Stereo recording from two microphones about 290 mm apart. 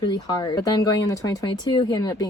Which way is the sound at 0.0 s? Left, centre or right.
Centre.